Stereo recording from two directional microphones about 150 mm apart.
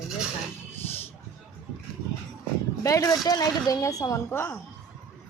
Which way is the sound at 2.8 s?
20° left (ahead or behind).